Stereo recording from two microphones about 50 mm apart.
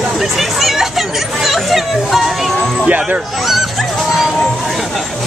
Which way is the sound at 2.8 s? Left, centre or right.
Right.